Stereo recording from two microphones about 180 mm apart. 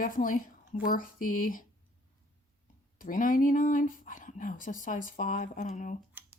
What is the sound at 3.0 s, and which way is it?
A woman's voice, 50° left (ahead or behind).